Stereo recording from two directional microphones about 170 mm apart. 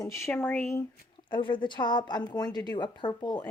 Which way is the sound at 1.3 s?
30° left (ahead or behind).